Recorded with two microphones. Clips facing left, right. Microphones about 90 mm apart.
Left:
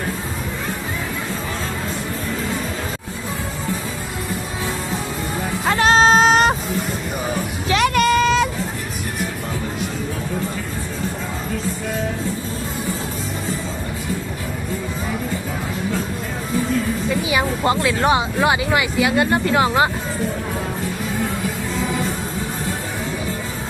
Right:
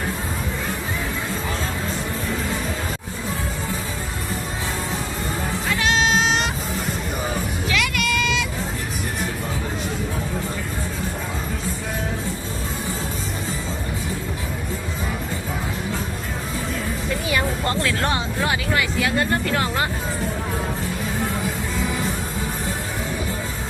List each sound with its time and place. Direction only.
5.6 s music: 40° left (ahead or behind)
7.7 s a sound: 40° left (ahead or behind)
17.6 s speech: 15° left (ahead or behind)